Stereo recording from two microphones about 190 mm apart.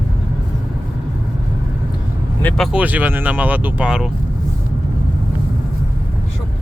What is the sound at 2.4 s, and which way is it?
Speech, centre (ahead or behind).